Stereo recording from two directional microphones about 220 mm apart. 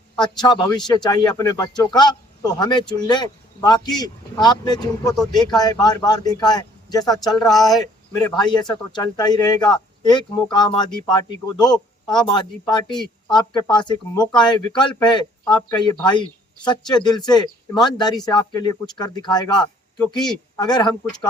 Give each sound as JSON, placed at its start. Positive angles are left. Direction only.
{"t": 0.2, "sound": "speech", "side_deg": 20}